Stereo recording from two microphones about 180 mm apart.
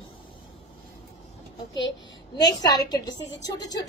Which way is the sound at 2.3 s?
20° left (ahead or behind).